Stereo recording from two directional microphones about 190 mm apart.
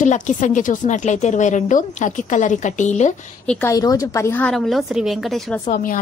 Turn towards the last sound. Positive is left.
turn(degrees=40)  # may be behind; listen again after turning